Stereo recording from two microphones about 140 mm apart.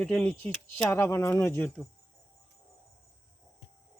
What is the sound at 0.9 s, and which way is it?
Speech, 20° left (ahead or behind).